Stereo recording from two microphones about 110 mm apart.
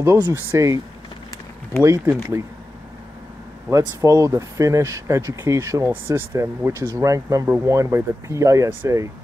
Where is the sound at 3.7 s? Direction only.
30° right (ahead or behind).